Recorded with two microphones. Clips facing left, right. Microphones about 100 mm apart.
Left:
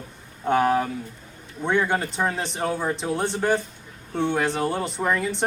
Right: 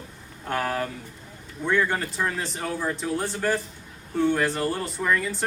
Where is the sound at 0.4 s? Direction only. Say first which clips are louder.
Left 7 dB; 20° left (ahead or behind).